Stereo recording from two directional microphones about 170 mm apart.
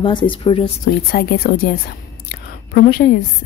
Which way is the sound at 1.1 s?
60° left (ahead or behind).